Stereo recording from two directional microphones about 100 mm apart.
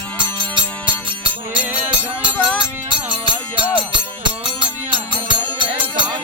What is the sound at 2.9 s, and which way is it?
Music, 50° right (ahead or behind).